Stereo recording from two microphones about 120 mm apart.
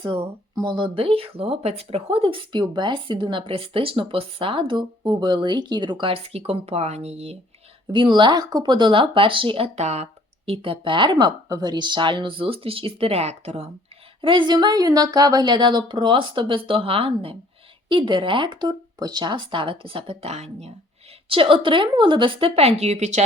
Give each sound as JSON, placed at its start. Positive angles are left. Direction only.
{"t": 0.0, "sound": "speech", "side_deg": -45}
{"t": 7.9, "sound": "speech", "side_deg": -40}
{"t": 9.7, "sound": "speech", "side_deg": -65}
{"t": 14.2, "sound": "speech", "side_deg": -45}
{"t": 21.2, "sound": "speech", "side_deg": -45}